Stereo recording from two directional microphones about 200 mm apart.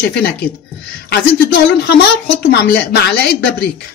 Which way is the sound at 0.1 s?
55° left (ahead or behind).